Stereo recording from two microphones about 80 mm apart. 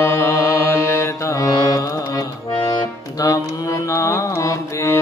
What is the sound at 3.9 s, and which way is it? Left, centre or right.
Music, left.